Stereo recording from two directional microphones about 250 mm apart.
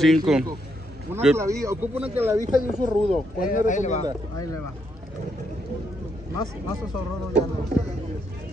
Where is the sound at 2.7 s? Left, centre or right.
Centre.